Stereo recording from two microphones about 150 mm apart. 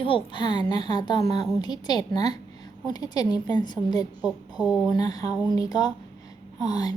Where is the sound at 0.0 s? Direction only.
35° left (ahead or behind).